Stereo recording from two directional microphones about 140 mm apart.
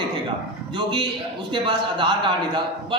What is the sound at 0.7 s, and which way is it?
A man's voice, 35° right (ahead or behind).